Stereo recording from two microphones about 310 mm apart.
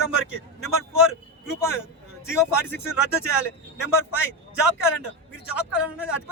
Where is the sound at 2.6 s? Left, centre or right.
Centre.